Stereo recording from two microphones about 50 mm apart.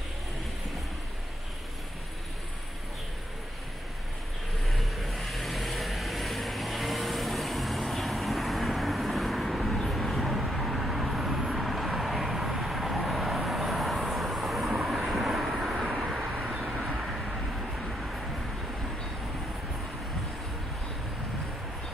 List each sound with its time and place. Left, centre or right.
4.6 s vehicle: centre
16.3 s vehicle: right
16.9 s vehicle: centre